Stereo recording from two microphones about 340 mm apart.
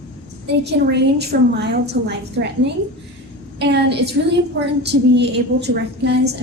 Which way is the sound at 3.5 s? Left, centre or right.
Right.